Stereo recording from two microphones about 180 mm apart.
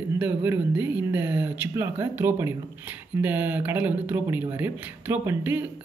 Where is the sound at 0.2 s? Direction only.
10° right (ahead or behind).